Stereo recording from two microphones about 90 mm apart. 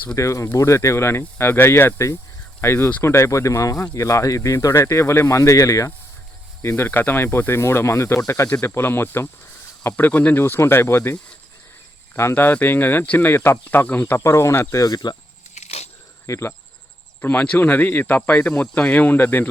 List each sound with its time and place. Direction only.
0.2 s speech: 35° left (ahead or behind)
6.6 s speech: 25° left (ahead or behind); by 15.1 s 45° left (ahead or behind)
16.2 s speech: 30° left (ahead or behind)
17.2 s speech: 20° left (ahead or behind)